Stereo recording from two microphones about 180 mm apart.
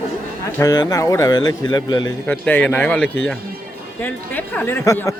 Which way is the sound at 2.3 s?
10° left (ahead or behind).